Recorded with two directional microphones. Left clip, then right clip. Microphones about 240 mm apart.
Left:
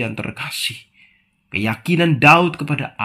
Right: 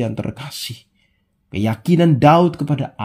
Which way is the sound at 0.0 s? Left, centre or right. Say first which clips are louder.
Even; right.